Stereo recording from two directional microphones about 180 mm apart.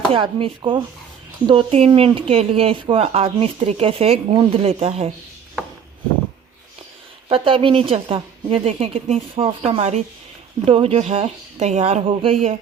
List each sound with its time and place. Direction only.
0.1 s speech: 30° right (ahead or behind)
7.3 s speech: 30° right (ahead or behind)